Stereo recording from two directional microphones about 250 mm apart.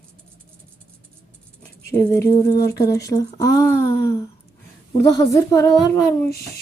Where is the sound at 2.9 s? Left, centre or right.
Centre.